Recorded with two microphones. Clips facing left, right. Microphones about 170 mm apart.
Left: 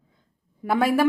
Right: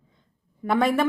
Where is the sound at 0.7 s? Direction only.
5° left (ahead or behind).